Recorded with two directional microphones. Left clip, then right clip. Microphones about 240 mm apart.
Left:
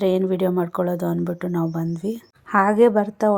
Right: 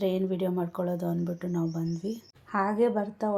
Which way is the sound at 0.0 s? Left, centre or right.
Left.